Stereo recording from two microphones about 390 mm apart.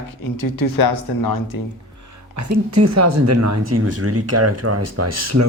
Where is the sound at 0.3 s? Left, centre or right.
Left.